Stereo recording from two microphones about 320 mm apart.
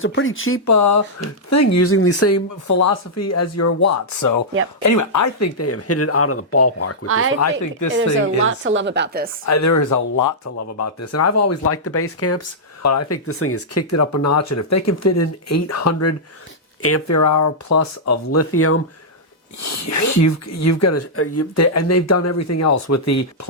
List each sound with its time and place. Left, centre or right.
0.0 s speech: left
0.6 s speech: left
4.8 s speech: left
8.4 s a woman's voice: right
9.5 s speech: left
10.8 s speech: left
19.6 s speech: left